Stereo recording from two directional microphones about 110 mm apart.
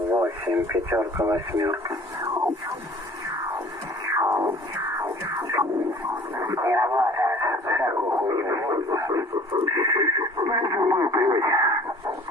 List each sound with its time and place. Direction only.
0.1 s speech: 20° right (ahead or behind)
4.1 s music: 30° right (ahead or behind)
6.5 s speech: 30° right (ahead or behind)